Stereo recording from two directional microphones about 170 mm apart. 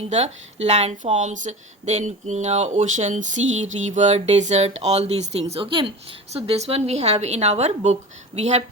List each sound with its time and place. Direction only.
0.1 s speech: 40° right (ahead or behind)